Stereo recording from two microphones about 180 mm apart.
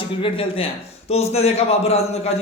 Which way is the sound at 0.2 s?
30° left (ahead or behind).